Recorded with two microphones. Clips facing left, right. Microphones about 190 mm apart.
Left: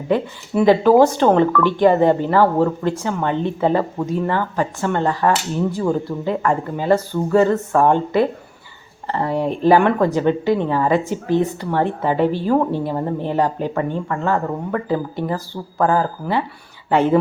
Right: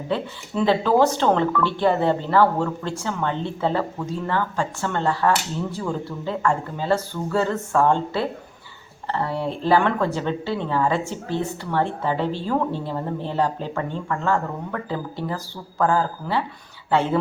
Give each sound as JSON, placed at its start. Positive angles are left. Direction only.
{"t": 0.1, "sound": "a woman's voice", "side_deg": 15}